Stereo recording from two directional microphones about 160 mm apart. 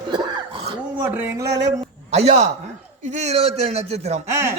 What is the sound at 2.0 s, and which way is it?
A man's voice, 40° right (ahead or behind).